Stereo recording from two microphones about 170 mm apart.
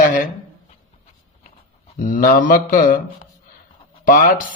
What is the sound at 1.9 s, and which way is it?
Speech, 50° left (ahead or behind).